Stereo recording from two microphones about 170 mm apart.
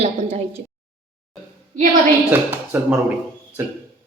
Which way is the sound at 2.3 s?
10° right (ahead or behind).